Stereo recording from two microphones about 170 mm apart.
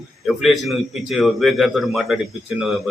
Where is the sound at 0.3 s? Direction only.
Centre (ahead or behind).